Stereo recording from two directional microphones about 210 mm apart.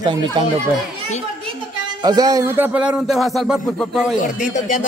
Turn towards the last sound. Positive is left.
turn(degrees=40)  # may be behind; listen again after turning